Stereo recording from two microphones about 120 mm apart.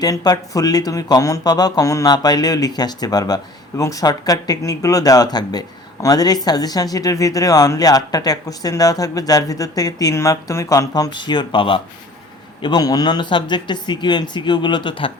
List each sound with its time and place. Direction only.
0.0 s speech: 30° left (ahead or behind)